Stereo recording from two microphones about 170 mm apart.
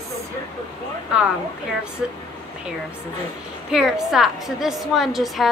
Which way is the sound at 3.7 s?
5° right (ahead or behind).